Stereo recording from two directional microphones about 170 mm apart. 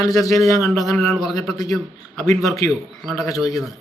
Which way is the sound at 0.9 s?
5° left (ahead or behind).